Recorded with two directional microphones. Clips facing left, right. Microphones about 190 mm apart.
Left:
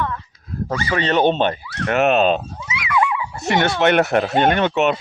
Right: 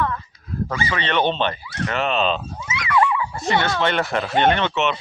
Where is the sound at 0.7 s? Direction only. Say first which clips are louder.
Left 5 dB; 40° left (ahead or behind).